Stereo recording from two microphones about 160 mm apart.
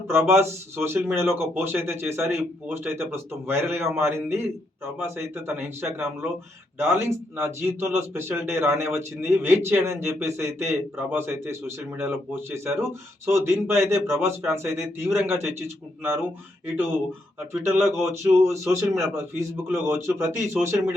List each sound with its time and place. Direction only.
0.1 s speech: 15° right (ahead or behind)
17.5 s speech: 15° right (ahead or behind)